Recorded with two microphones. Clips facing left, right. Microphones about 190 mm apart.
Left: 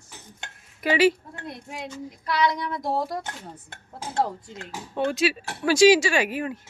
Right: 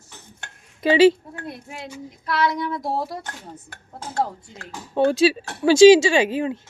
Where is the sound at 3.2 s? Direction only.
25° left (ahead or behind).